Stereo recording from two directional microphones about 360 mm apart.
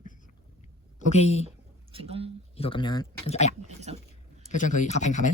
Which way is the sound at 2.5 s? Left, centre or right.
Centre.